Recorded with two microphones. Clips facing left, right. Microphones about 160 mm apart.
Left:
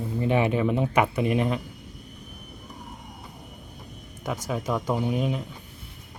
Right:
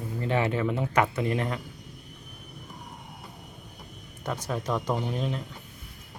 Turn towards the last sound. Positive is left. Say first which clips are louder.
# left 4 dB
turn(degrees=10)  # may be behind; listen again after turning